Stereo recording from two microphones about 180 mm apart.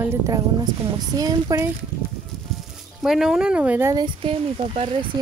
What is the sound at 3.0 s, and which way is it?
Speech, centre (ahead or behind).